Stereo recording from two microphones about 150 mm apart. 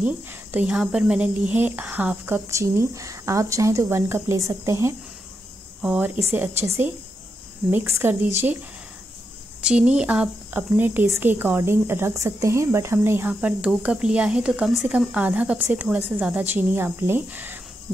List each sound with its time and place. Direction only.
0.0 s speech: 10° right (ahead or behind)
9.6 s speech: 5° right (ahead or behind)